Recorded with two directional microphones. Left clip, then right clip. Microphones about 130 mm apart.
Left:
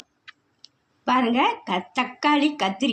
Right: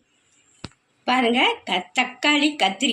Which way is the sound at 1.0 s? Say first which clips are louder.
Right 1 dB; 70° left (ahead or behind).